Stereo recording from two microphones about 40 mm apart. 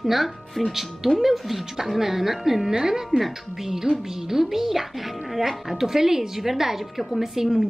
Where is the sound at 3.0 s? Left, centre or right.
Centre.